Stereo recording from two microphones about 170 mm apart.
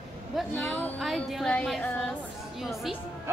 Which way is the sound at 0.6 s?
10° left (ahead or behind).